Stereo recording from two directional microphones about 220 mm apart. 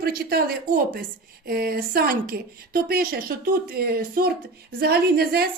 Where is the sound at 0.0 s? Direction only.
45° right (ahead or behind).